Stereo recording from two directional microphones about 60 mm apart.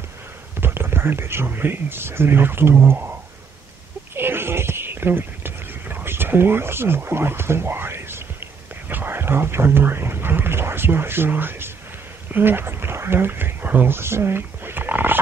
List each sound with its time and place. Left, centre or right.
0.6 s speech: right
4.1 s a sound: right
12.3 s speech: right